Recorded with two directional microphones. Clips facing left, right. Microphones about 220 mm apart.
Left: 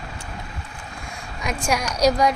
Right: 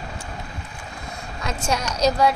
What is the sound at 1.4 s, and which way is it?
Speech, 15° left (ahead or behind).